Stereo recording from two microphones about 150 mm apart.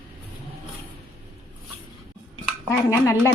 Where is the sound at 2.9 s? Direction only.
20° left (ahead or behind).